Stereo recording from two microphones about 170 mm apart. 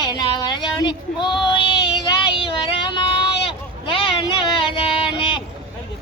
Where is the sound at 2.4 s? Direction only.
30° left (ahead or behind).